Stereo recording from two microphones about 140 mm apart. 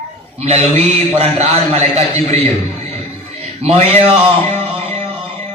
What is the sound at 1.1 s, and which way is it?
A man's voice, 50° right (ahead or behind).